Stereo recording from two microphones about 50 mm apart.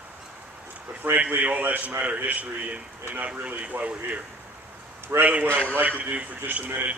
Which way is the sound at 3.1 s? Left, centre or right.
Right.